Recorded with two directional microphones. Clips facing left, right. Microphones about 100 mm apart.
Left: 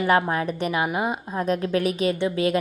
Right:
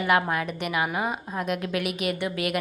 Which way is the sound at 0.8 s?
20° left (ahead or behind).